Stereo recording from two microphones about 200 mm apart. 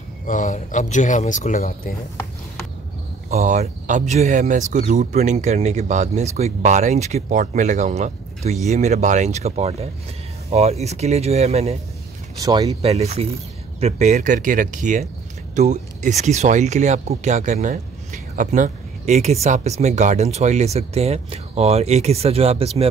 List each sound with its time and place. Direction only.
0.3 s speech: 40° left (ahead or behind)
3.3 s speech: 35° right (ahead or behind)